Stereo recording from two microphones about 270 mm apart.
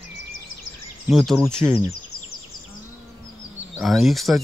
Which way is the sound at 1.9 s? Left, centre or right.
Left.